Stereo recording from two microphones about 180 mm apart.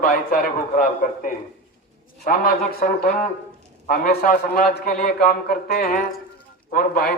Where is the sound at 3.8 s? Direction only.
55° left (ahead or behind).